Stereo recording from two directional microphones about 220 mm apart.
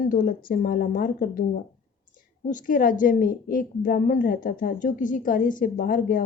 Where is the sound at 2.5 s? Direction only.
35° left (ahead or behind).